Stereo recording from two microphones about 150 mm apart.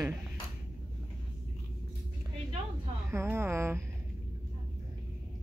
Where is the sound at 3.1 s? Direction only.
15° right (ahead or behind).